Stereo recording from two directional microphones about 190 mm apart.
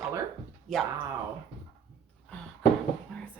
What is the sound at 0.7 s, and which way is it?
Speech, centre (ahead or behind).